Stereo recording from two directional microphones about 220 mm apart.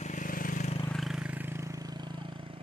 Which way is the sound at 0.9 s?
Centre (ahead or behind).